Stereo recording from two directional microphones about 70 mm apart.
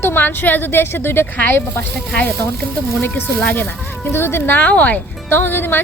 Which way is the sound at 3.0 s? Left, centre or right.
Left.